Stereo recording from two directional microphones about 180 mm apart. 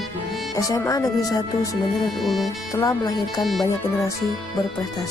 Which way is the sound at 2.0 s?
Centre (ahead or behind).